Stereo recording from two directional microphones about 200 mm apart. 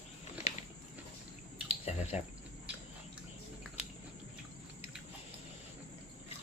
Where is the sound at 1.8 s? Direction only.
30° left (ahead or behind).